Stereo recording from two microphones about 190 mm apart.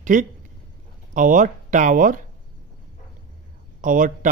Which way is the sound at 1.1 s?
45° right (ahead or behind).